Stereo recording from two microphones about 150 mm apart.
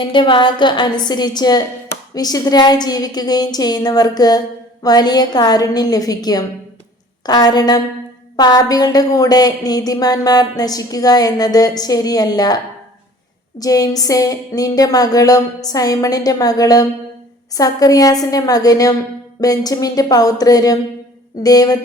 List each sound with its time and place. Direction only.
0.1 s a sound: 30° left (ahead or behind)
1.0 s a woman's voice: 30° left (ahead or behind)
13.6 s a woman's voice: 25° left (ahead or behind)